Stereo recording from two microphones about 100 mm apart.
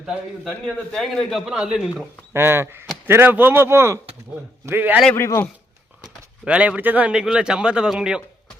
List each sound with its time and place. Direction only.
0.0 s a man's voice: 5° right (ahead or behind)
0.9 s a man's voice: 5° left (ahead or behind)
2.3 s speech: 25° right (ahead or behind)
5.1 s a man's voice: 25° left (ahead or behind)
6.0 s speech: 10° right (ahead or behind)